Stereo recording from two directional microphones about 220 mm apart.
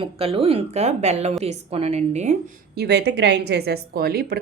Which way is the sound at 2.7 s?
45° right (ahead or behind).